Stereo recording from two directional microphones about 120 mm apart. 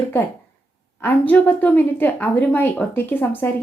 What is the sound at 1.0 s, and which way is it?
Speech, 15° left (ahead or behind).